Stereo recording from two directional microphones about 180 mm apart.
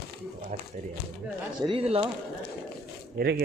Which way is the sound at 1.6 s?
30° right (ahead or behind).